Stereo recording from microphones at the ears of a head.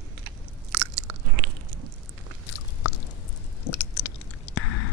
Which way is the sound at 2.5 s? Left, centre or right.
Left.